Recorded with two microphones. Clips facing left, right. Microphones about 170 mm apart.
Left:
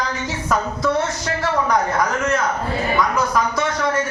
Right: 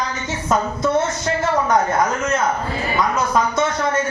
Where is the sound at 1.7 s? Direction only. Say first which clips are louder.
Right 2 dB; 25° right (ahead or behind).